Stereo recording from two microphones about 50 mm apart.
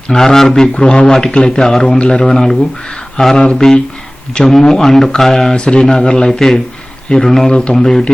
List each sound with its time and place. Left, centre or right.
0.1 s speech: centre
7.8 s speech: centre